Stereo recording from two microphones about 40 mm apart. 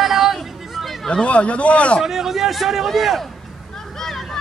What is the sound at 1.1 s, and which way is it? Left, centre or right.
Speech, left.